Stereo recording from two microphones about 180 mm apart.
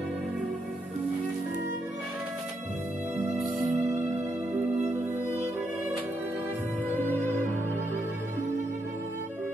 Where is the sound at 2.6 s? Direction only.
10° right (ahead or behind).